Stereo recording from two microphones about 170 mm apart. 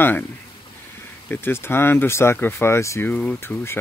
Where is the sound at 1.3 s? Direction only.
15° left (ahead or behind).